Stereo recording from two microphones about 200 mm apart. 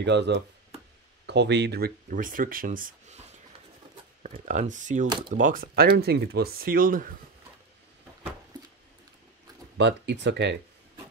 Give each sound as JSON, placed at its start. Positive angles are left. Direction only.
{"t": 0.0, "sound": "speech", "side_deg": -60}
{"t": 4.2, "sound": "speech", "side_deg": -40}
{"t": 9.8, "sound": "speech", "side_deg": -60}